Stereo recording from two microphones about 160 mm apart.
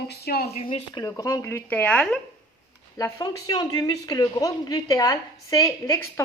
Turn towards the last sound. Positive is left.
turn(degrees=20)  # may be behind; listen again after turning